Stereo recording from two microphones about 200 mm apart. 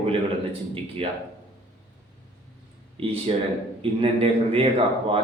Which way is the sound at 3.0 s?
30° right (ahead or behind).